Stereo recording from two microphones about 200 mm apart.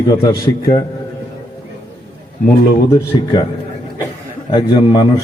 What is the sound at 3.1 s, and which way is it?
Speech, 25° left (ahead or behind).